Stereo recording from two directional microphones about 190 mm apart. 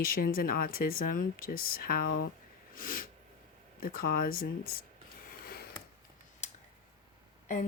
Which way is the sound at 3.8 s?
50° left (ahead or behind).